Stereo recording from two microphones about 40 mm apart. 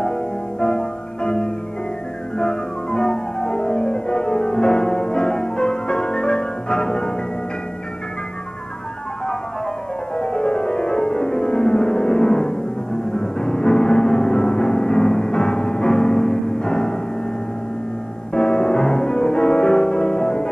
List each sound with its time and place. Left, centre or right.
0.0 s music: left
10.1 s music: left
18.3 s music: left